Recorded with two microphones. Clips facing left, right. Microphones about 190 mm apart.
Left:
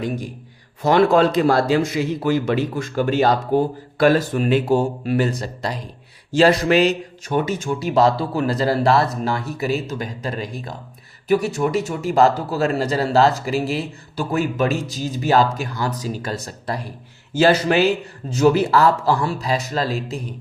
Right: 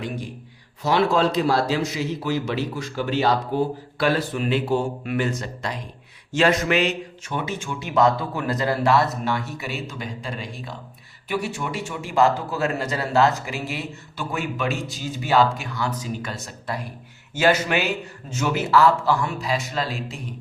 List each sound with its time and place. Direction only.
0.8 s a man's voice: 50° left (ahead or behind)